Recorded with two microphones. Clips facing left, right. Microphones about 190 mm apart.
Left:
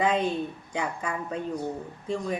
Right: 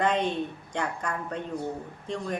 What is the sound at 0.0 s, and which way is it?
A man's voice, 5° left (ahead or behind).